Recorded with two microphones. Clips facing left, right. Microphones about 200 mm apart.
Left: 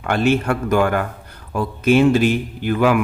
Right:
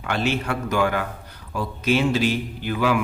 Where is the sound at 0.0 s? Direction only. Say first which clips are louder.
Left 7 dB; 50° left (ahead or behind).